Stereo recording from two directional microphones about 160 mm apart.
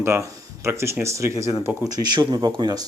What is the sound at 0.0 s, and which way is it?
Speech, 15° right (ahead or behind).